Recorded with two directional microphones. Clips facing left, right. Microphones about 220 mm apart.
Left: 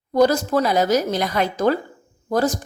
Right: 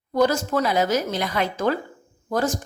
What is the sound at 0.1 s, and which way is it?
A woman's voice, 35° left (ahead or behind).